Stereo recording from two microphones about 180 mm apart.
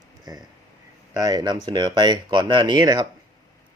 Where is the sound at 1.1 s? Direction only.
20° right (ahead or behind).